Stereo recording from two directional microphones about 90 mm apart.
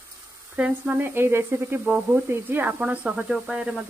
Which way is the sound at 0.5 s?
10° right (ahead or behind).